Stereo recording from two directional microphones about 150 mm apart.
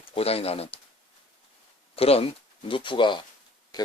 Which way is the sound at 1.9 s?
40° left (ahead or behind).